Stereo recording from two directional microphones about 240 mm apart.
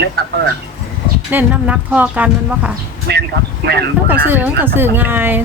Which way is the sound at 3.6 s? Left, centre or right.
Right.